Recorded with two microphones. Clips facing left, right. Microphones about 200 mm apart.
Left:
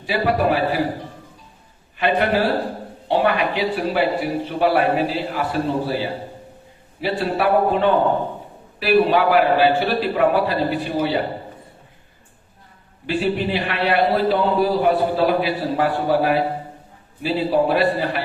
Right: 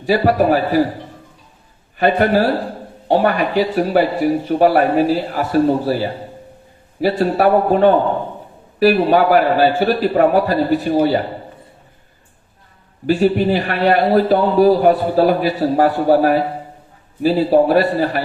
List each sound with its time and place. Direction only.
0.0 s a man's voice: 45° right (ahead or behind)
2.0 s a man's voice: 40° right (ahead or behind)
13.1 s a man's voice: 45° right (ahead or behind)